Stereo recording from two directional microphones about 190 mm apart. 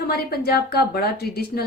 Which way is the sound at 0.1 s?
55° left (ahead or behind).